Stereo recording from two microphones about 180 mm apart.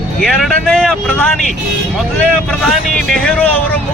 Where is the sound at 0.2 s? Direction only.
Centre (ahead or behind).